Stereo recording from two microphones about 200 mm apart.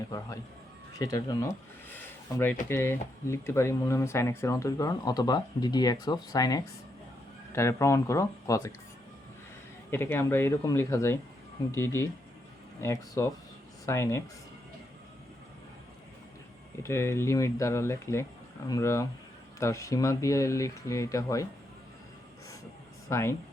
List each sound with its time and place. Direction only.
0.9 s speech: 15° left (ahead or behind)
1.9 s a sound: 10° left (ahead or behind)
2.6 s speech: 10° left (ahead or behind)
9.9 s speech: 10° left (ahead or behind)
16.8 s speech: 15° left (ahead or behind)
23.0 s speech: 15° left (ahead or behind)